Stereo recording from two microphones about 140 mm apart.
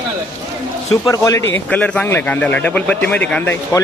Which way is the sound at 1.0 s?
25° left (ahead or behind).